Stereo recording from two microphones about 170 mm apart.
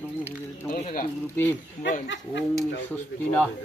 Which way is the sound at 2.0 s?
90° left.